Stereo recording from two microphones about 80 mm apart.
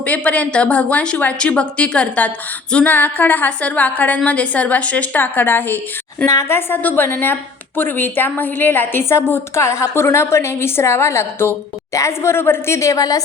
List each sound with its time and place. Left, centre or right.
0.0 s a woman's voice: centre
6.2 s a woman's voice: left
6.6 s a woman's voice: left